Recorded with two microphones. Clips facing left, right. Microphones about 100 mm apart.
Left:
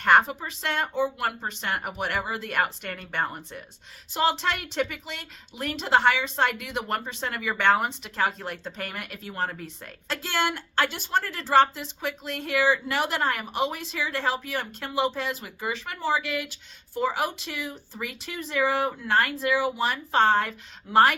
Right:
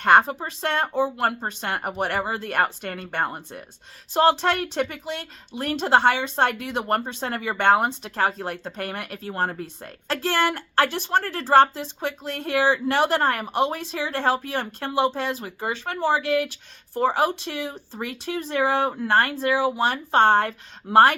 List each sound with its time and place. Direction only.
0.0 s a woman's voice: 40° right (ahead or behind)